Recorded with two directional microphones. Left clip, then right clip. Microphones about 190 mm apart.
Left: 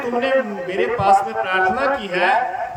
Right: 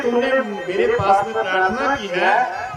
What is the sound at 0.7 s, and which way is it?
A man's voice, centre (ahead or behind).